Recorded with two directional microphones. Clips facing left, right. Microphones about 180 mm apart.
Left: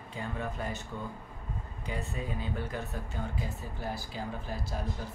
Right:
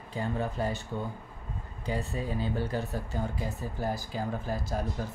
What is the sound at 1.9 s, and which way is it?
Speech, 35° right (ahead or behind).